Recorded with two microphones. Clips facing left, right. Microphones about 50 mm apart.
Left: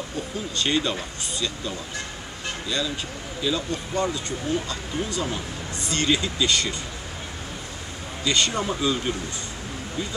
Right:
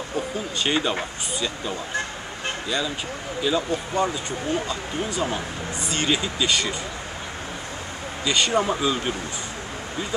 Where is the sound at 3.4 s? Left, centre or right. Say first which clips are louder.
Right 3 dB; centre.